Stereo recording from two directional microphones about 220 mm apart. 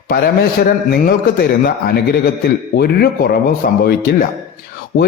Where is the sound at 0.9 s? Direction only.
45° left (ahead or behind).